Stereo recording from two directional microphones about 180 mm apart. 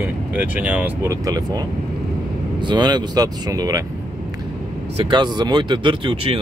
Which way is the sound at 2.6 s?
25° right (ahead or behind).